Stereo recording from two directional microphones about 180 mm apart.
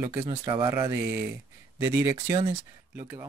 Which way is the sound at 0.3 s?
30° right (ahead or behind).